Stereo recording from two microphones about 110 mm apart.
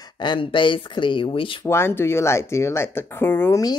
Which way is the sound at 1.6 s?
20° left (ahead or behind).